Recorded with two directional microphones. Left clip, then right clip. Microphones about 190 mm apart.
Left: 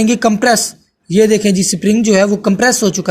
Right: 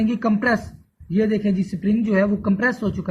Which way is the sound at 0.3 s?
30° left (ahead or behind).